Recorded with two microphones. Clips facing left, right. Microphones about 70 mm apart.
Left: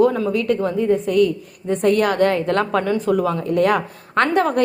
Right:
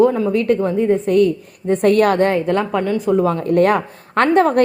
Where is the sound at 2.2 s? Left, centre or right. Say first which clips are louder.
Right 1 dB; right.